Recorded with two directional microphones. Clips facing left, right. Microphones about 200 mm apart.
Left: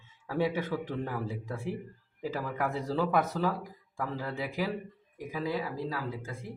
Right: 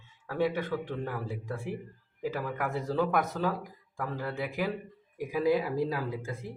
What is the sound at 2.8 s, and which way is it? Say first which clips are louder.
Speech: right 1 dB; centre (ahead or behind).